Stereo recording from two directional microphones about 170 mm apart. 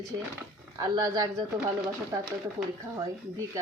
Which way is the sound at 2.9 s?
15° right (ahead or behind).